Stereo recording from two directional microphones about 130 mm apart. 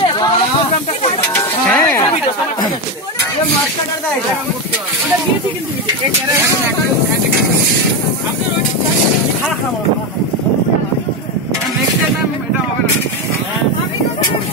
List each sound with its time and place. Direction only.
0.0 s snake: 35° left (ahead or behind)
1.3 s stir: 15° left (ahead or behind)